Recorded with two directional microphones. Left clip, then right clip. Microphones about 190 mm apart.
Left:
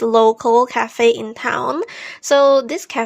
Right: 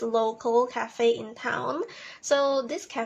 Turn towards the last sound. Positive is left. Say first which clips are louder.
# left 12 dB
turn(degrees=45)  # may be behind; listen again after turning